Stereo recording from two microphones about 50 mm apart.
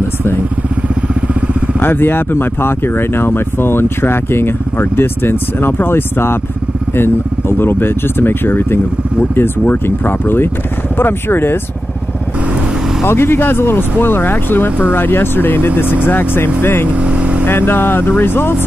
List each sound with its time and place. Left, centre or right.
1.2 s motorcycle: right
1.8 s speech: left
13.0 s speech: left
16.9 s vehicle: right
17.5 s speech: left